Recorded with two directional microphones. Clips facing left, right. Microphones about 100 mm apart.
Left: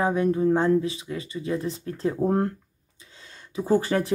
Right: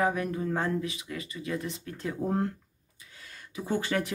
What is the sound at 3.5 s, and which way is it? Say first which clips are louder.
Speech: left 7 dB; 35° left (ahead or behind).